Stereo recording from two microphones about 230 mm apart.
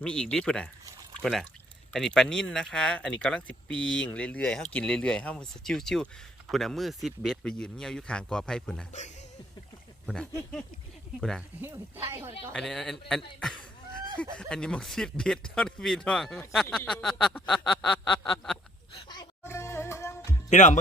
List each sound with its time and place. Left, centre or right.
0.0 s speech: centre
10.1 s speech: centre
11.6 s speech: centre
12.5 s speech: centre
18.2 s quack: centre
18.9 s music: centre
20.5 s speech: left